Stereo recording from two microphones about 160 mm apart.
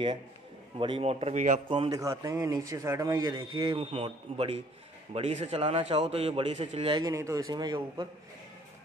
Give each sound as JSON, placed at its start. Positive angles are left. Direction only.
{"t": 0.7, "sound": "a man's voice", "side_deg": -35}
{"t": 1.9, "sound": "a man's voice", "side_deg": -20}